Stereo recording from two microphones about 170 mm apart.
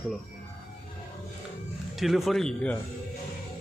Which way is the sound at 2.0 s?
Centre (ahead or behind).